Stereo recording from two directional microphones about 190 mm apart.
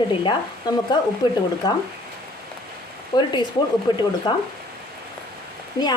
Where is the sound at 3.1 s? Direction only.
20° left (ahead or behind).